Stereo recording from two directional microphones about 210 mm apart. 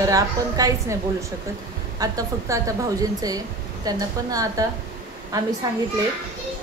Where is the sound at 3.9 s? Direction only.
15° right (ahead or behind).